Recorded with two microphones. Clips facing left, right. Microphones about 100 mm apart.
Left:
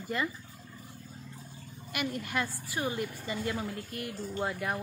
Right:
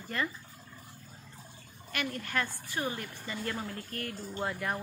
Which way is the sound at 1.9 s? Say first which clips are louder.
Left 1 dB; 10° left (ahead or behind).